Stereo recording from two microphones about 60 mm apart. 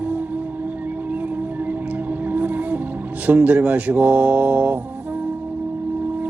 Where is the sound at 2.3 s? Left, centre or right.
Right.